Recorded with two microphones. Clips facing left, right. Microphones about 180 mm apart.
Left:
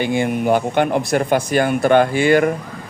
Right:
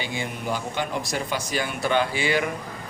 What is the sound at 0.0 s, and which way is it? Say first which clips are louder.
Speech: left 12 dB; 55° left (ahead or behind).